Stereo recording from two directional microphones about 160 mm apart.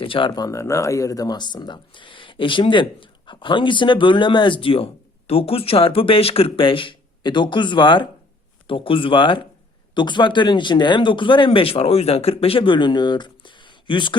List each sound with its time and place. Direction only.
0.0 s speech: 30° left (ahead or behind)